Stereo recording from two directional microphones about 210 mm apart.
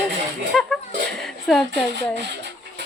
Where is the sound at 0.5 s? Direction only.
Centre (ahead or behind).